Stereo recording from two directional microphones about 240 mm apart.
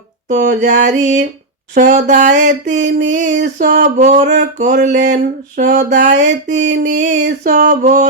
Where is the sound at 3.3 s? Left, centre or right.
Right.